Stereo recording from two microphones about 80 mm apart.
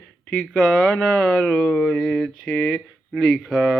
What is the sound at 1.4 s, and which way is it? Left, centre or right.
Speech, centre.